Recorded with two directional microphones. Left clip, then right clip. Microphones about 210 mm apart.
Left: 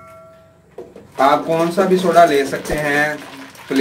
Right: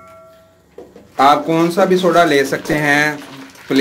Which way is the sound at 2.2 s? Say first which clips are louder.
Right 1 dB; 50° right (ahead or behind).